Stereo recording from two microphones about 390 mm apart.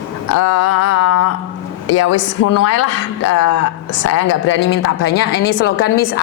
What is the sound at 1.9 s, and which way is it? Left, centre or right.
Speech, left.